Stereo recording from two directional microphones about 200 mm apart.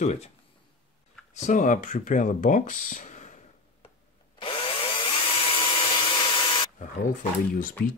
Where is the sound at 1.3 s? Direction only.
40° left (ahead or behind).